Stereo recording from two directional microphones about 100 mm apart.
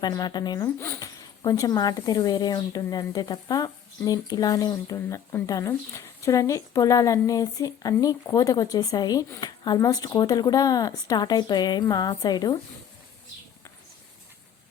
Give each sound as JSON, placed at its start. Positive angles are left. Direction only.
{"t": 0.0, "sound": "speech", "side_deg": 45}
{"t": 0.6, "sound": "speech", "side_deg": 25}